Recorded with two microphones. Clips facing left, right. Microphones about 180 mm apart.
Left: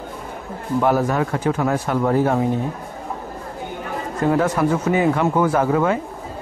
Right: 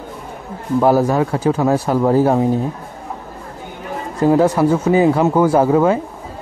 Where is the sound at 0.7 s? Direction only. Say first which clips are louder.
Right 5 dB; 35° right (ahead or behind).